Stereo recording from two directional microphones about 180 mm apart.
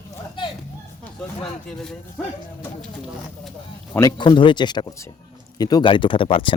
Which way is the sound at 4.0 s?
20° left (ahead or behind).